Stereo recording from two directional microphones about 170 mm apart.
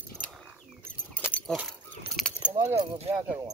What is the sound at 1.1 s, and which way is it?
Keys jangling, 10° left (ahead or behind).